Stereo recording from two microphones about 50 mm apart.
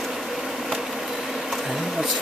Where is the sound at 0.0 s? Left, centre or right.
Centre.